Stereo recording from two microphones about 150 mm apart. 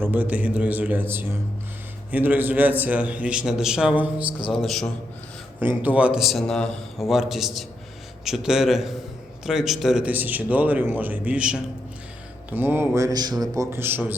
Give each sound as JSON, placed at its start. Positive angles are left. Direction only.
{"t": 0.0, "sound": "a man's voice", "side_deg": -10}
{"t": 5.5, "sound": "a man's voice", "side_deg": -10}